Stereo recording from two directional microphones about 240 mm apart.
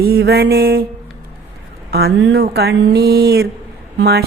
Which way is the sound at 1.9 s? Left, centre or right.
Right.